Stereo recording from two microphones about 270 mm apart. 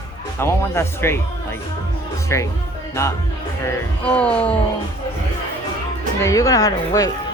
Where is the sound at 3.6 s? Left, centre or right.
Centre.